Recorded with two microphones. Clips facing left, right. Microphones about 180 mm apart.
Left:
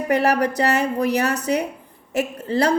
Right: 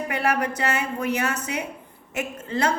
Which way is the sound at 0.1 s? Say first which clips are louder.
Left 7 dB; 40° left (ahead or behind).